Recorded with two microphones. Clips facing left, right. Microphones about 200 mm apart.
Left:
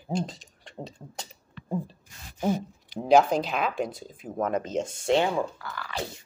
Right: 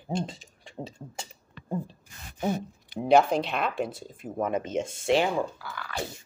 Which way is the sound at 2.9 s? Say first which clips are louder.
Left 1 dB; centre (ahead or behind).